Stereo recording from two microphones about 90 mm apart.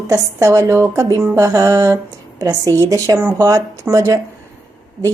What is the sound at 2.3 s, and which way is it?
Speech, 45° right (ahead or behind).